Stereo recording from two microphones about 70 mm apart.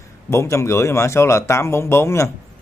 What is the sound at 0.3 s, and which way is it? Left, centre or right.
Speech, left.